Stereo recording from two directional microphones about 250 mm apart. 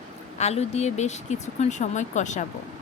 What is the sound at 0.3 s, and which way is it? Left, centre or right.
Speech, left.